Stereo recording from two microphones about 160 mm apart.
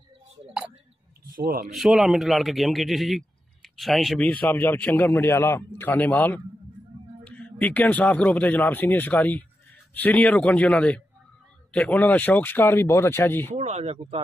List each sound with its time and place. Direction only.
1.3 s a man's voice: 65° right (ahead or behind)
1.7 s a man's voice: centre (ahead or behind)
13.6 s speech: 40° right (ahead or behind)